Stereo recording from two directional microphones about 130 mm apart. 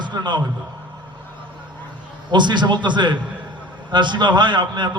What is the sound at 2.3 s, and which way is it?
A man's voice, 35° right (ahead or behind).